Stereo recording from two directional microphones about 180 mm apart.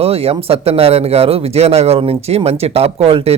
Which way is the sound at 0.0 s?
35° right (ahead or behind).